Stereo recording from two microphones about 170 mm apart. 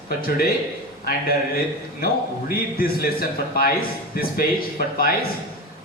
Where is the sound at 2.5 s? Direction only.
60° left (ahead or behind).